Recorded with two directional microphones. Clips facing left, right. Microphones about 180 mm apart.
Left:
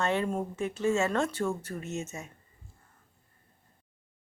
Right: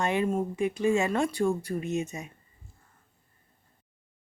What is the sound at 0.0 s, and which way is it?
Speech, 15° right (ahead or behind).